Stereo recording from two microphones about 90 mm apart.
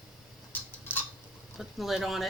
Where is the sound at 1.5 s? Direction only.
5° right (ahead or behind).